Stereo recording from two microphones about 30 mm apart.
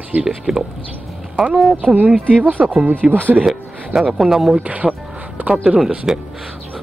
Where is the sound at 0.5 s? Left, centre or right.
Right.